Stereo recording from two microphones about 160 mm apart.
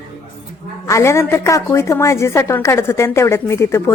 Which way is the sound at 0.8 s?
20° left (ahead or behind).